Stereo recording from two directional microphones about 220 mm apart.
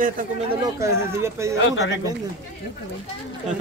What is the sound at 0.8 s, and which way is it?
Speech, 15° right (ahead or behind).